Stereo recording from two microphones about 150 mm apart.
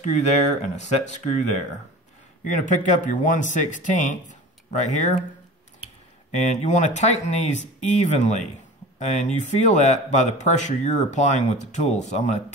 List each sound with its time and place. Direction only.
0.0 s speech: 55° left (ahead or behind)
2.4 s speech: 60° left (ahead or behind)
6.3 s speech: 50° left (ahead or behind)